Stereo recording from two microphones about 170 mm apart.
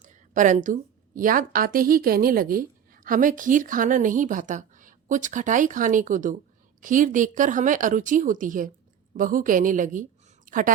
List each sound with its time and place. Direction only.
0.0 s a woman's voice: 50° right (ahead or behind)